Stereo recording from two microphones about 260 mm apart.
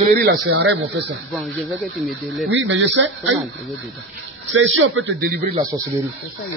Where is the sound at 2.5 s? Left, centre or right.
Right.